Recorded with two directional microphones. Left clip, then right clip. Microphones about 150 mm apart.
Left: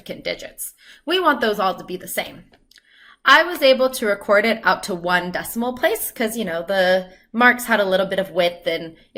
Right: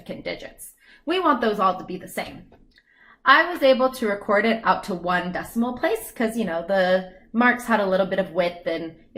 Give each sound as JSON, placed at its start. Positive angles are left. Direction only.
{"t": 0.0, "sound": "speech", "side_deg": 15}
{"t": 3.2, "sound": "speech", "side_deg": 15}